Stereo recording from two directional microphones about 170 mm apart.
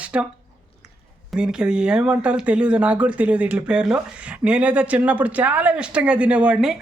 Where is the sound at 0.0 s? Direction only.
5° right (ahead or behind).